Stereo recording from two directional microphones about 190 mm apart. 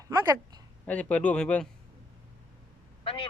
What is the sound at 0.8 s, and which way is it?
Speech, 5° left (ahead or behind).